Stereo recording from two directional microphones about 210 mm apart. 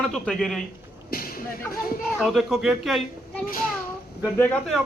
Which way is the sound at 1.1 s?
45° left (ahead or behind).